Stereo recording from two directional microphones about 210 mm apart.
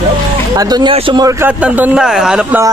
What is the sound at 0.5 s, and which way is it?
Speech, 20° right (ahead or behind).